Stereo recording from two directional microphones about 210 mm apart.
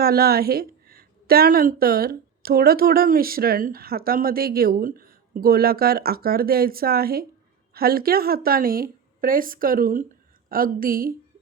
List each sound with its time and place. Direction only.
0.0 s a woman's voice: 45° right (ahead or behind)